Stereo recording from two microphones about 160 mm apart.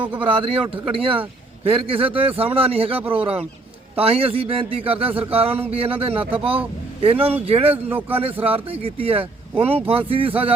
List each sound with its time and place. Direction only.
0.2 s a man's voice: 35° right (ahead or behind)
7.9 s a man's voice: 10° right (ahead or behind)
8.2 s a man's voice: 35° right (ahead or behind)